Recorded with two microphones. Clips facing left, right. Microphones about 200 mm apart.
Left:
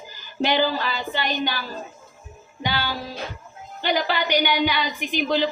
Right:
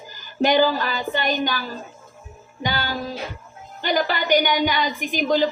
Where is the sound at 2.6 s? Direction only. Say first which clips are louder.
Right 1 dB; 45° right (ahead or behind).